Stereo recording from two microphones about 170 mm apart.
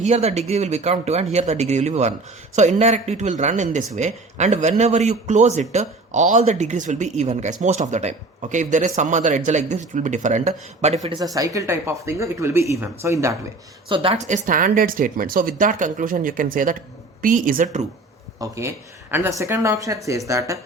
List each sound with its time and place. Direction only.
0.0 s a man's voice: 40° right (ahead or behind)
11.3 s speech: 20° right (ahead or behind)
13.8 s a man's voice: 30° right (ahead or behind); by 17.8 s 45° right (ahead or behind)
18.3 s speech: 15° right (ahead or behind)